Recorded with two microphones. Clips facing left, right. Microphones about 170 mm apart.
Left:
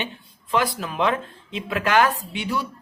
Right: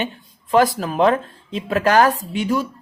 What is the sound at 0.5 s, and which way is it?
Speech, 45° right (ahead or behind).